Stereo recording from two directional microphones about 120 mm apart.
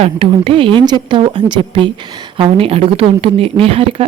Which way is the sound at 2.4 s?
55° right (ahead or behind).